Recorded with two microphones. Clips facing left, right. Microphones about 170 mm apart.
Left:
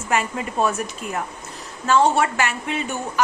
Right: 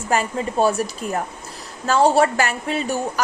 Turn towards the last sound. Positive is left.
turn(degrees=-35)  # may be behind; listen again after turning